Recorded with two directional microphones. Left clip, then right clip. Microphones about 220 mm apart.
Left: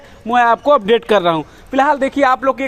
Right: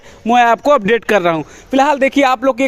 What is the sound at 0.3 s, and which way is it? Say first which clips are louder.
A man's voice: right 1 dB; 50° right (ahead or behind).